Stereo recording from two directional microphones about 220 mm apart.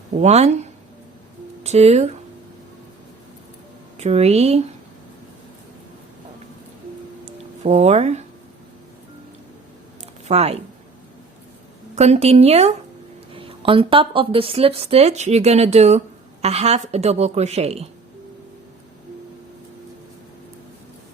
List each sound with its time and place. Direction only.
0.1 s speech: 30° right (ahead or behind)
3.9 s speech: 30° right (ahead or behind)
7.6 s speech: 30° right (ahead or behind)
10.2 s speech: 30° right (ahead or behind)
11.9 s speech: 30° right (ahead or behind)